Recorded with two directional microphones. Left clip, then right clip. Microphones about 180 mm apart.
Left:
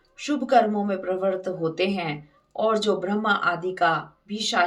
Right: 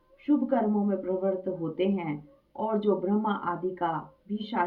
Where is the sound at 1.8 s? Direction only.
15° left (ahead or behind).